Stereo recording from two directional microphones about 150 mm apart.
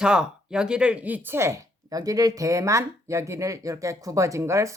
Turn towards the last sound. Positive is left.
turn(degrees=-20)  # may be behind; listen again after turning